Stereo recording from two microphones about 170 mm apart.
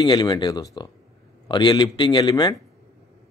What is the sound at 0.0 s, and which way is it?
Speech, 25° left (ahead or behind).